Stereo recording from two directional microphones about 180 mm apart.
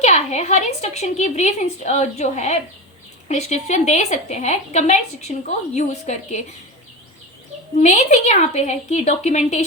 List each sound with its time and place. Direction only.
0.0 s a woman's voice: 40° left (ahead or behind)
7.8 s a woman's voice: 40° left (ahead or behind)